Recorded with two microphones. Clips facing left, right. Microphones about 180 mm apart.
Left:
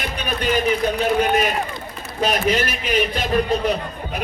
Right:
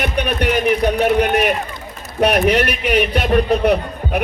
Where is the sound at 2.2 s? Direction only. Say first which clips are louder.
Right 5 dB; 65° right (ahead or behind).